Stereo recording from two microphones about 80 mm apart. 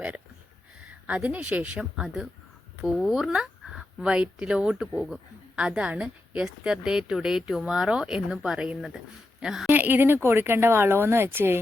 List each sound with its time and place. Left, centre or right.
1.0 s a woman's voice: centre
9.6 s speech: right